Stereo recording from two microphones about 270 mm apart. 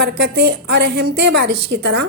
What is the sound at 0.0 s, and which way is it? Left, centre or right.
A woman's voice, right.